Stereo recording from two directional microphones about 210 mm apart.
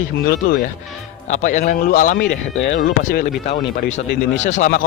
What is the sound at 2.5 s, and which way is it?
Speech, 65° left (ahead or behind).